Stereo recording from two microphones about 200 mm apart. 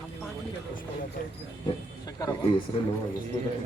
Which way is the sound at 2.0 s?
20° left (ahead or behind).